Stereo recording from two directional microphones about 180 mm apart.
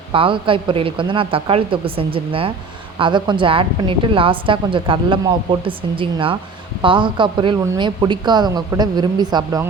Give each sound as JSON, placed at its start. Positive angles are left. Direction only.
{"t": 0.1, "sound": "a woman's voice", "side_deg": -30}